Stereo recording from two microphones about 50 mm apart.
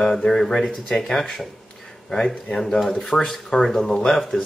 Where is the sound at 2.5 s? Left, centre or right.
Centre.